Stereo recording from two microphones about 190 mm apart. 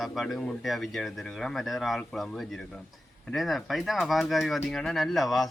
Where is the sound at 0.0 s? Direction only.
Centre (ahead or behind).